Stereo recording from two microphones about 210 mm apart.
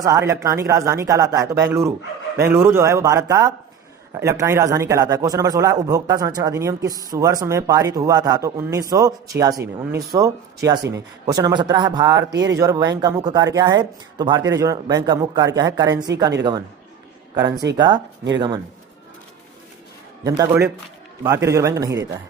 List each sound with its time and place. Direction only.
0.0 s a man's voice: 15° right (ahead or behind)
17.3 s a man's voice: 20° right (ahead or behind)
20.2 s a man's voice: 15° right (ahead or behind)